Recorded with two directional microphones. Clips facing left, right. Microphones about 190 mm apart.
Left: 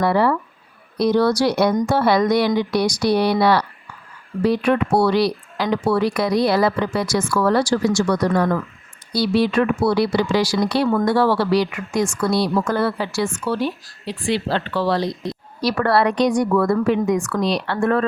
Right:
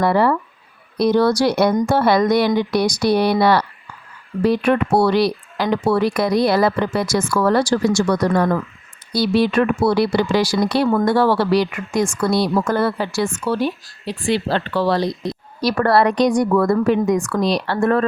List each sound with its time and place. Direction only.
0.0 s speech: 50° right (ahead or behind)